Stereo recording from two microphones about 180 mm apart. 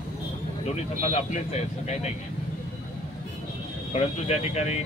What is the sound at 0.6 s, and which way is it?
Speech, 40° left (ahead or behind).